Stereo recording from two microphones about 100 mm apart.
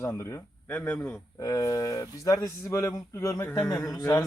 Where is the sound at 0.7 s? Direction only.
15° left (ahead or behind).